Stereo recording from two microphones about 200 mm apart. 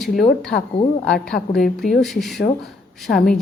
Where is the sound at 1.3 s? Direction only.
45° left (ahead or behind).